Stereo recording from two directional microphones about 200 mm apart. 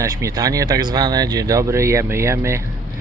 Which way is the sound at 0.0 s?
15° right (ahead or behind).